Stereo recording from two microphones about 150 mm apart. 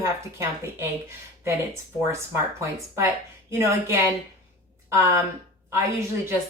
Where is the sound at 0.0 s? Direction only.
20° right (ahead or behind).